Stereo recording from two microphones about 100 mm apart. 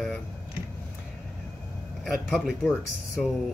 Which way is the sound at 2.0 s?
Centre (ahead or behind).